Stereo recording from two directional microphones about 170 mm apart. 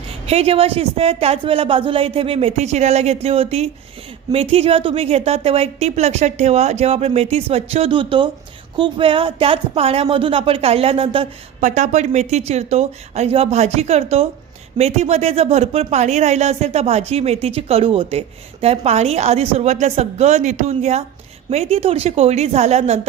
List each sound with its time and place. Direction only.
0.3 s speech: 35° right (ahead or behind)
11.6 s speech: 45° right (ahead or behind)